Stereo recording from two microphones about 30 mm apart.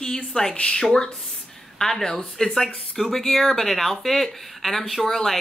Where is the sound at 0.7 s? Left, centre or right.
Left; by 5.4 s centre.